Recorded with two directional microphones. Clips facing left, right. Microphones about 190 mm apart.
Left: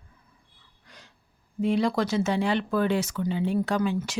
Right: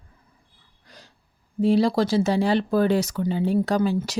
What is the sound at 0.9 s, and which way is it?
Breathing, 35° right (ahead or behind).